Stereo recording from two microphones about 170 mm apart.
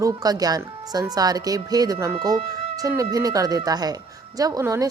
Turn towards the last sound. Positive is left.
turn(degrees=-20)  # may be behind; listen again after turning